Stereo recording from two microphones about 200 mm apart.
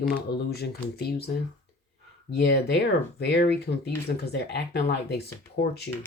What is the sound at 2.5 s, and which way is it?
Speech, 55° left (ahead or behind).